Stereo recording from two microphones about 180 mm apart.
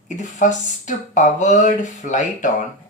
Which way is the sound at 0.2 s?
45° left (ahead or behind).